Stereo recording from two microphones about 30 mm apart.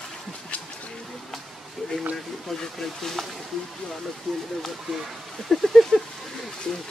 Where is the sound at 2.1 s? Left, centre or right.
Centre.